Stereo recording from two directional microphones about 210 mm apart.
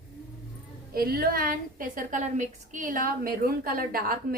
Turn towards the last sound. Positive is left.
turn(degrees=-45)  # may be behind; listen again after turning